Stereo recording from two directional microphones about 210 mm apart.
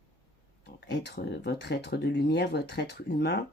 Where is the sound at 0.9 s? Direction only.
50° left (ahead or behind).